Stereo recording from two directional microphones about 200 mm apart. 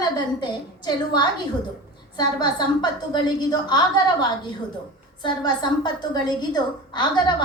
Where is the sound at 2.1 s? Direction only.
20° left (ahead or behind).